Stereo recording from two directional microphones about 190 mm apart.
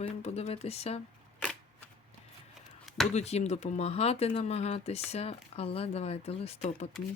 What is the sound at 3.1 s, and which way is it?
Speech, 35° left (ahead or behind).